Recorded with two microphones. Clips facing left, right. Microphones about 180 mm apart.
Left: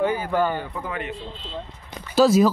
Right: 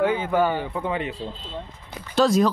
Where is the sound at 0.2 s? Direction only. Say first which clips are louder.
Right 1 dB; 15° right (ahead or behind).